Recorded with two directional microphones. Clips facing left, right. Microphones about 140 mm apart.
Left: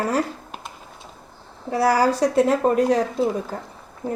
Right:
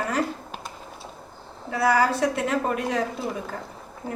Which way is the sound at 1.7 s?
35° left (ahead or behind).